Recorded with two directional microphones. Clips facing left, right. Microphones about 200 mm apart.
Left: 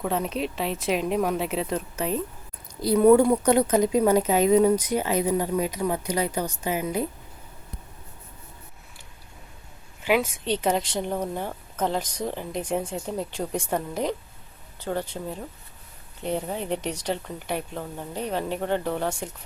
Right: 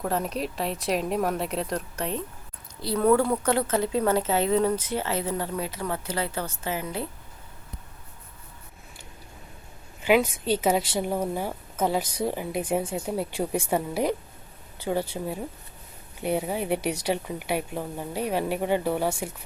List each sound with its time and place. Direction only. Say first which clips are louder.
0.0 s speech: left 1 dB; centre (ahead or behind)
2.8 s a woman's voice: left 5 dB; 15° left (ahead or behind)
10.0 s speech: right 2 dB; centre (ahead or behind)